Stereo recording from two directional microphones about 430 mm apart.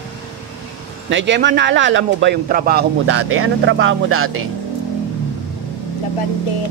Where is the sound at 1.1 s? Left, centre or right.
Right.